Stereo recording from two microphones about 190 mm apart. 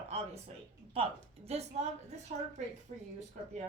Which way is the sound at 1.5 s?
35° right (ahead or behind).